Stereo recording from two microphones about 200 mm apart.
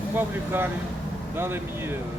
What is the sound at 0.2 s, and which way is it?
Speech, 10° right (ahead or behind).